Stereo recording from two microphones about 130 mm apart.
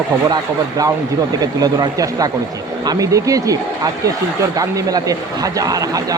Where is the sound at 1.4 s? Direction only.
30° right (ahead or behind).